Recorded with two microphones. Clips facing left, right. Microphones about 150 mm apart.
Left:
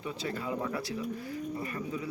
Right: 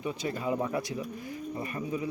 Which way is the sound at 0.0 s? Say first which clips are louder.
Right 3 dB; 15° right (ahead or behind).